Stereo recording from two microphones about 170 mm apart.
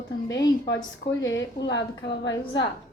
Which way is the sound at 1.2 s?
90° left.